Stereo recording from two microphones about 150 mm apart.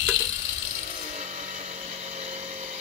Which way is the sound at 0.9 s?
50° right (ahead or behind).